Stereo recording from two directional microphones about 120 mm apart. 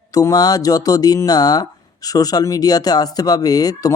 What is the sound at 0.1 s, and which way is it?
A man's voice, 30° left (ahead or behind).